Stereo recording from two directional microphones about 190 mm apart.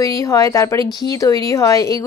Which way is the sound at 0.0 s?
15° left (ahead or behind).